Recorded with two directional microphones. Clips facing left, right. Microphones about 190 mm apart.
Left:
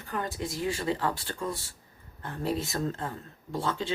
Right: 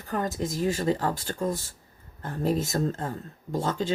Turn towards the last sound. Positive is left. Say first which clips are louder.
# right 4 dB
turn(degrees=-40)  # may be behind; listen again after turning